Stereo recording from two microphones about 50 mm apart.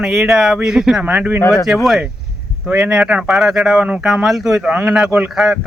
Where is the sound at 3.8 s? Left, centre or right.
Right.